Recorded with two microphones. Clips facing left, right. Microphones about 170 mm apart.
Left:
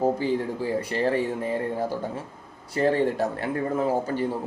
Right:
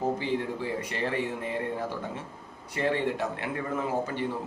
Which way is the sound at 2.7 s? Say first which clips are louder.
Left 5 dB; 40° left (ahead or behind).